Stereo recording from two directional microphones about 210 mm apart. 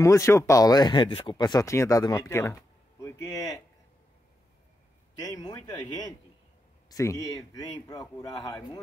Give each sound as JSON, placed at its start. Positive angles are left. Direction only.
{"t": 0.0, "sound": "speech", "side_deg": 15}
{"t": 5.2, "sound": "speech", "side_deg": 20}